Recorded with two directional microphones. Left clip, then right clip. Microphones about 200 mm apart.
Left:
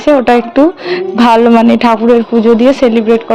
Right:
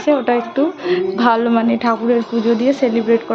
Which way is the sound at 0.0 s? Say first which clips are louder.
Left 8 dB; 40° left (ahead or behind).